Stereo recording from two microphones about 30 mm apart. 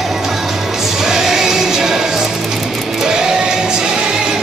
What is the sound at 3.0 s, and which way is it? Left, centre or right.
Music, right.